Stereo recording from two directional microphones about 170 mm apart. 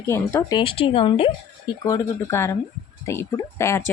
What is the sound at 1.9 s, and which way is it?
Speech, 20° left (ahead or behind).